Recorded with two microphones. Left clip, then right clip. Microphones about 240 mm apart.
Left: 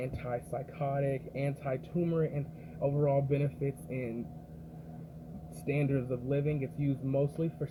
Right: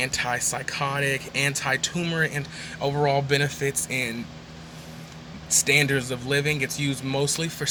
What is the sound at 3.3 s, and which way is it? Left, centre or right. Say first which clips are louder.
Speech: right 10 dB; right.